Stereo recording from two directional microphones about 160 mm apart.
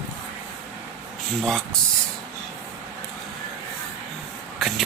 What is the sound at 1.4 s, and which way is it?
Speech, 5° left (ahead or behind).